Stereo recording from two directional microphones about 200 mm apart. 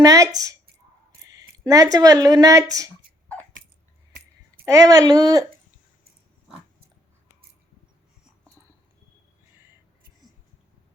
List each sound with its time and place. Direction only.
0.0 s speech: 15° right (ahead or behind)
4.6 s speech: 15° right (ahead or behind)